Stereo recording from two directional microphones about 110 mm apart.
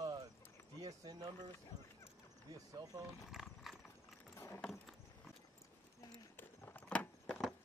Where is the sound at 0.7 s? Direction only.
35° right (ahead or behind).